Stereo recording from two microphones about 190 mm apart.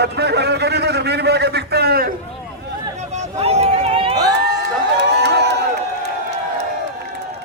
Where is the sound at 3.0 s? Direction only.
35° right (ahead or behind).